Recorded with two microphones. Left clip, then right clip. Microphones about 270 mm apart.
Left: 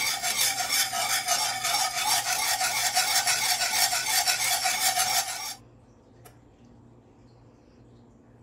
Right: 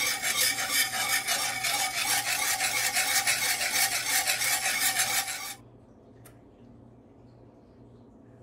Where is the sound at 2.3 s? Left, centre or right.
Centre.